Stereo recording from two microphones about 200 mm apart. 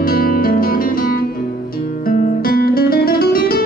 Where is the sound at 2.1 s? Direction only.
45° left (ahead or behind).